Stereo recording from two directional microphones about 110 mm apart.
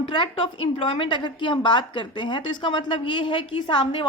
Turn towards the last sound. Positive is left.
turn(degrees=50)  # may be behind; listen again after turning